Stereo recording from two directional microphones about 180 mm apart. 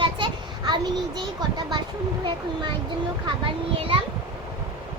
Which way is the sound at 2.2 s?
25° right (ahead or behind).